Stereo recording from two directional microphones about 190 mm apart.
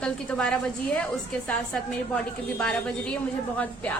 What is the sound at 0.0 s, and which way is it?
A woman's voice, 5° left (ahead or behind).